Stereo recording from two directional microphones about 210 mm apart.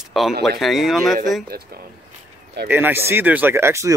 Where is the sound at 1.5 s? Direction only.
45° right (ahead or behind).